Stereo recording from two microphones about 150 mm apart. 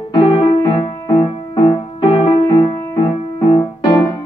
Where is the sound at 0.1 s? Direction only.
30° left (ahead or behind).